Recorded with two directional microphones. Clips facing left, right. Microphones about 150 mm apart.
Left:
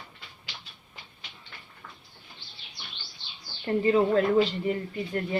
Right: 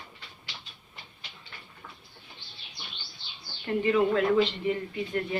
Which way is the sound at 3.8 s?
35° left (ahead or behind).